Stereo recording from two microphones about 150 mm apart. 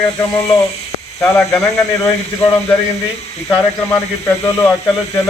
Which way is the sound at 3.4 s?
15° left (ahead or behind).